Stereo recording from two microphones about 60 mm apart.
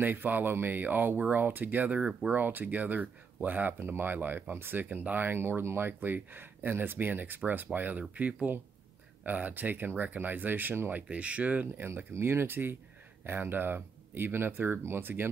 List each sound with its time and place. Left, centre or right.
0.0 s speech: right
2.0 s speech: centre
2.3 s speech: right
11.6 s speech: right